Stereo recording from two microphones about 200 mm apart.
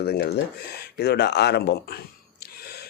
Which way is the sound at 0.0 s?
50° left (ahead or behind).